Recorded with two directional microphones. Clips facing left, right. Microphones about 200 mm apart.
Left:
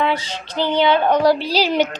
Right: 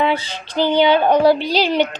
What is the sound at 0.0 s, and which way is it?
Child singing, 30° right (ahead or behind).